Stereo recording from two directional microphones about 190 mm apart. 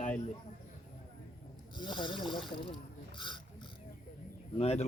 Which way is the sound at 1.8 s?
25° left (ahead or behind).